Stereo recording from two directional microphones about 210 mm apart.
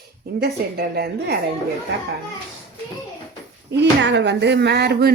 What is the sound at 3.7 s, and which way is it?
Speech, 55° right (ahead or behind).